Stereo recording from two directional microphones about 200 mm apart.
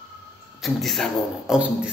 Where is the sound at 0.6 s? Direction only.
Centre (ahead or behind).